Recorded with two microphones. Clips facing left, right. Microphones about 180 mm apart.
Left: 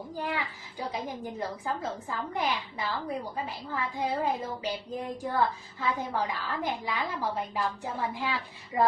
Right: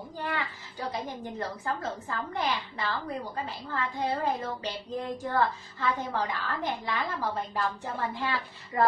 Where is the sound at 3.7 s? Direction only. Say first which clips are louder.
Right 1 dB; 10° left (ahead or behind).